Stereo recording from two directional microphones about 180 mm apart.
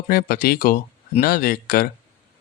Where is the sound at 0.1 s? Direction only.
60° left (ahead or behind).